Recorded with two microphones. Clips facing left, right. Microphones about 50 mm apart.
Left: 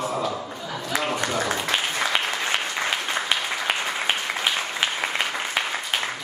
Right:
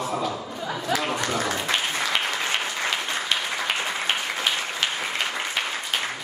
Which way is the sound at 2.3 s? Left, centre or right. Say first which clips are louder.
Left 1 dB; centre.